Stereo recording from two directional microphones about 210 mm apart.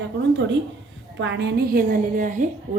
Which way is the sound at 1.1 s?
55° right (ahead or behind).